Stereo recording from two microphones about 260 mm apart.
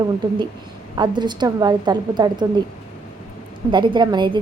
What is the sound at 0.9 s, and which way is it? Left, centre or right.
A woman's voice, centre.